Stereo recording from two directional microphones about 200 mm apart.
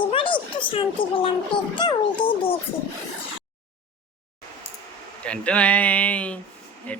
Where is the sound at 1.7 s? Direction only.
20° left (ahead or behind).